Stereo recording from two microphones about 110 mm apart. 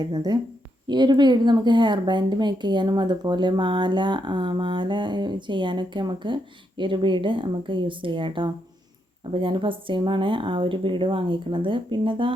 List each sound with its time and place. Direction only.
0.0 s a woman's voice: 35° right (ahead or behind)